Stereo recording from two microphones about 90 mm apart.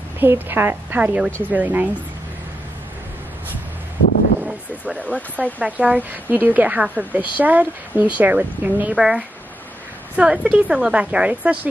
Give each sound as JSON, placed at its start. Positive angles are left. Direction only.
{"t": 0.2, "sound": "a woman's voice", "side_deg": -25}
{"t": 4.4, "sound": "a sound", "side_deg": -15}
{"t": 5.6, "sound": "a woman's voice", "side_deg": -15}
{"t": 8.9, "sound": "a woman's voice", "side_deg": -5}